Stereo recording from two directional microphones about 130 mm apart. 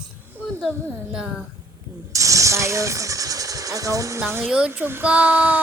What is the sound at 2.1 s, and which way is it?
Speech, 25° right (ahead or behind).